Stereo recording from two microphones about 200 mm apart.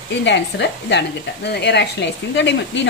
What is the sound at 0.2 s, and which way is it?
Speech, 60° left (ahead or behind).